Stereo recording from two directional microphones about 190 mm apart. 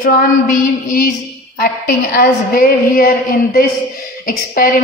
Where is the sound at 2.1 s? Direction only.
50° left (ahead or behind).